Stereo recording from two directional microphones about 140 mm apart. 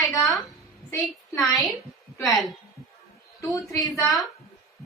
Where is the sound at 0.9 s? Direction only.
10° left (ahead or behind).